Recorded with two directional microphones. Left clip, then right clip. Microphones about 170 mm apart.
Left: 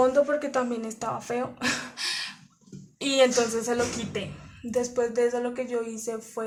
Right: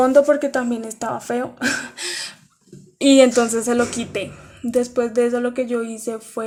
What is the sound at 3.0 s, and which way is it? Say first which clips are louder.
Speech: right 9 dB; 40° right (ahead or behind).